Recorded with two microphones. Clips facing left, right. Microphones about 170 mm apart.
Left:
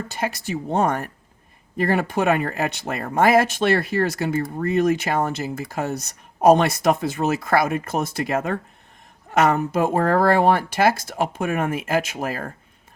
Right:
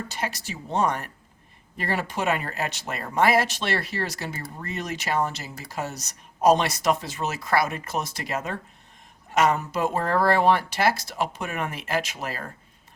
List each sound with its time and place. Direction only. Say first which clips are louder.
0.1 s speech: left 6 dB; 55° left (ahead or behind)